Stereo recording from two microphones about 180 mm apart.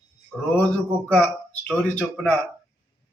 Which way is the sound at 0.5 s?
10° left (ahead or behind).